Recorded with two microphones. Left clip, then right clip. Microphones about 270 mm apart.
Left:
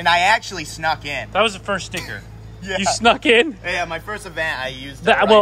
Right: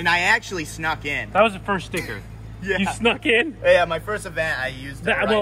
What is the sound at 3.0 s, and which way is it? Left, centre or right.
Speech, left.